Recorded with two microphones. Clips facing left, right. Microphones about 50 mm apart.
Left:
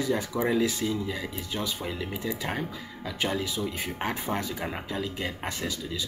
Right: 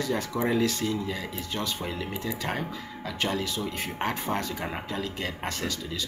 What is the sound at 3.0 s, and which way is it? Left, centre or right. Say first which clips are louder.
Speech: even; centre.